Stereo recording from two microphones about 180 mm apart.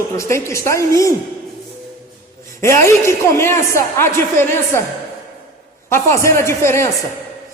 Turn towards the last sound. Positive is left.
turn(degrees=15)  # may be behind; listen again after turning